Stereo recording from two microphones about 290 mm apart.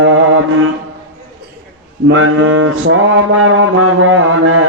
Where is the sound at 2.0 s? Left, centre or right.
Right.